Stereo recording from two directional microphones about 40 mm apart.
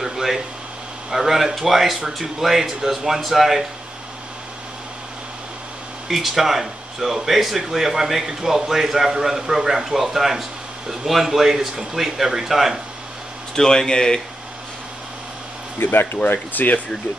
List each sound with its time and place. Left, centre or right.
0.0 s a sound: centre
1.1 s speech: centre
6.0 s speech: centre
13.6 s speech: centre
15.8 s speech: left
16.3 s speech: left